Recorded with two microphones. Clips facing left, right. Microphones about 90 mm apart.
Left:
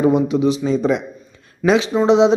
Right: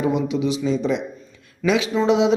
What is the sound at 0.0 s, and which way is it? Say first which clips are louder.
A man's voice: left 6 dB; 35° left (ahead or behind).